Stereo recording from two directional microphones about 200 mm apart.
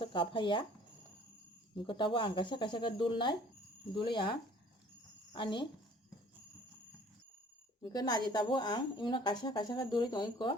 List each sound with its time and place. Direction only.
0.0 s speech: 25° left (ahead or behind)
1.7 s a woman's voice: 25° left (ahead or behind)
7.9 s a woman's voice: 20° left (ahead or behind)